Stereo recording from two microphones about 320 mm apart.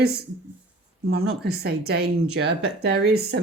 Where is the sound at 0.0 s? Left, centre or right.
Right.